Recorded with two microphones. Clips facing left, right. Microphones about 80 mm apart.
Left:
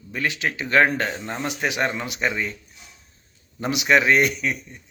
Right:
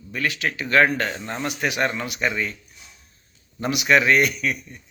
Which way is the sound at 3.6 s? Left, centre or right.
Centre.